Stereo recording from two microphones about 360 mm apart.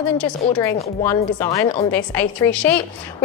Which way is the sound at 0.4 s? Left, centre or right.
Centre.